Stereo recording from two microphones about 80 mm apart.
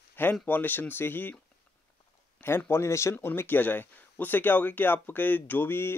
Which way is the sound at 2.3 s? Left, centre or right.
Left.